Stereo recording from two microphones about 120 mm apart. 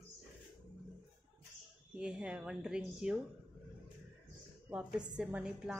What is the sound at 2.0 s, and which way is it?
A woman's voice, 10° right (ahead or behind).